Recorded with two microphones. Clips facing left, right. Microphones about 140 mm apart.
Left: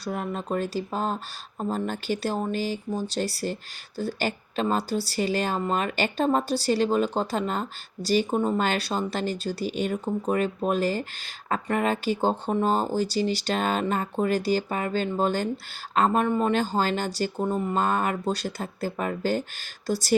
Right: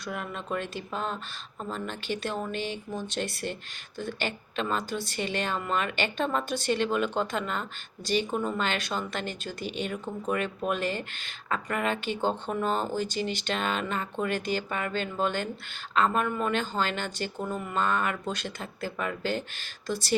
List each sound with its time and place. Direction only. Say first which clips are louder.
0.0 s speech: left 5 dB; 40° left (ahead or behind)